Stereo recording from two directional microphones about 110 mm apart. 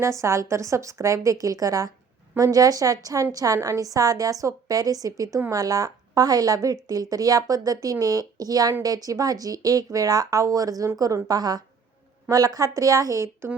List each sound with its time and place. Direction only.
0.0 s a woman's voice: 25° right (ahead or behind)